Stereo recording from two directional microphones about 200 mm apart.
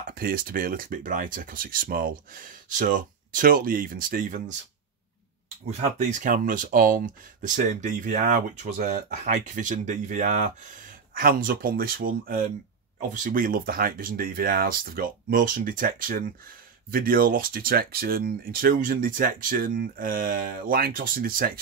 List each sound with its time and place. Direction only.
0.1 s speech: 45° right (ahead or behind)
5.7 s speech: 35° right (ahead or behind)